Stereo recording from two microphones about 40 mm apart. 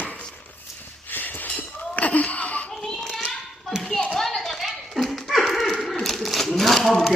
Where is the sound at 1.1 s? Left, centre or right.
Left.